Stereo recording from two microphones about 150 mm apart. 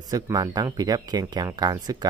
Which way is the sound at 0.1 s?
25° right (ahead or behind).